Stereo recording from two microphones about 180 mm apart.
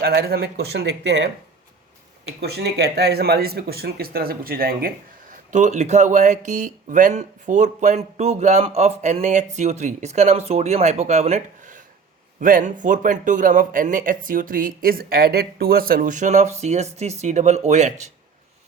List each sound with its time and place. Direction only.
0.0 s speech: 60° right (ahead or behind)
2.4 s speech: 65° right (ahead or behind)
5.3 s a man's voice: 45° right (ahead or behind)